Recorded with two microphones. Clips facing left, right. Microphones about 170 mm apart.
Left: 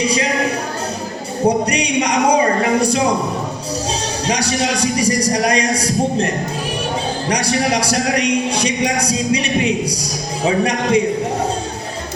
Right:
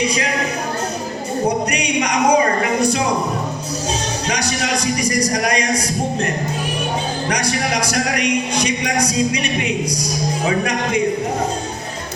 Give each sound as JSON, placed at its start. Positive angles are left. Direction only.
{"t": 1.5, "sound": "a man's voice", "side_deg": 30}
{"t": 4.3, "sound": "a man's voice", "side_deg": 30}
{"t": 7.3, "sound": "a man's voice", "side_deg": 30}